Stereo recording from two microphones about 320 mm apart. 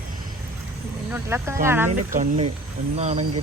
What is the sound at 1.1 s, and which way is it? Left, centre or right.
Speech, centre.